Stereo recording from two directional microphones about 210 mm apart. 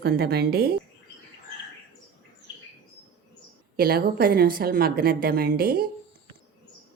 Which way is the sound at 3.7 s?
45° right (ahead or behind).